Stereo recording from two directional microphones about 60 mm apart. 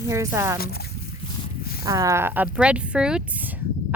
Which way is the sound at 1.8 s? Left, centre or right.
Right.